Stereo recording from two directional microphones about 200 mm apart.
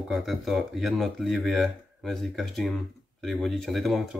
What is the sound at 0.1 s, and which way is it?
Speech, centre (ahead or behind).